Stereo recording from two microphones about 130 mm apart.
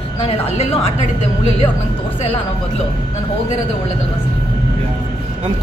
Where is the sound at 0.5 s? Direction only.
50° left (ahead or behind).